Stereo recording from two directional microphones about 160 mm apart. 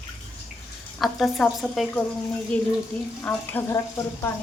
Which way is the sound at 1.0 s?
Centre (ahead or behind).